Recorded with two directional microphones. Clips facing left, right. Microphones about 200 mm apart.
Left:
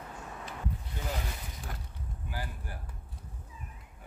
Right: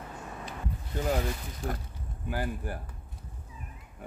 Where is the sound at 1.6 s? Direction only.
60° right (ahead or behind).